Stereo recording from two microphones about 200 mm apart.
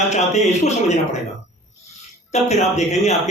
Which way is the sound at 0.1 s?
35° left (ahead or behind).